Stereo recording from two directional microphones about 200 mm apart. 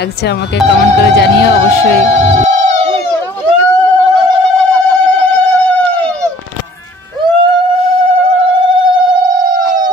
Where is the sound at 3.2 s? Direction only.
10° left (ahead or behind).